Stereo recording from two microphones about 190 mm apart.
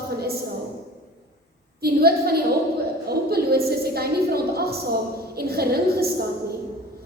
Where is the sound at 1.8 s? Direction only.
55° right (ahead or behind).